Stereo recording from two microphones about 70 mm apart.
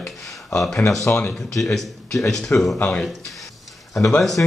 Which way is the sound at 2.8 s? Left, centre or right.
Centre.